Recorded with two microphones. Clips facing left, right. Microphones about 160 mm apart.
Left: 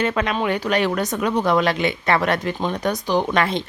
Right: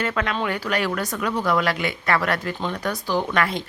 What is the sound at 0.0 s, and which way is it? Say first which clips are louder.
A woman's voice: left 3 dB; 20° left (ahead or behind).